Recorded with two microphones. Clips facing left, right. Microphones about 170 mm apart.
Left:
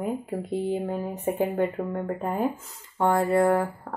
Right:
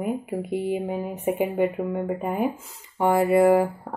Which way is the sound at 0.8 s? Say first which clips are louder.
Right 1 dB; 15° right (ahead or behind).